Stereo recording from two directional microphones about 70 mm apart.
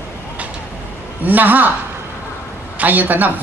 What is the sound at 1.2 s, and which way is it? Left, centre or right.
Speech, right.